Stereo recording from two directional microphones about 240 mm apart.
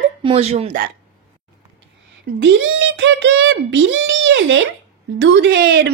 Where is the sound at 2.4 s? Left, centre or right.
Right.